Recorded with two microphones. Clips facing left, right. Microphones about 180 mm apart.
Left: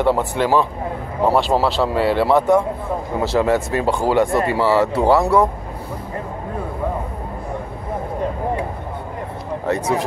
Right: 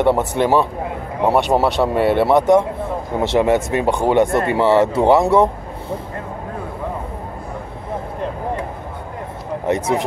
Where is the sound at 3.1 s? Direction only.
25° right (ahead or behind).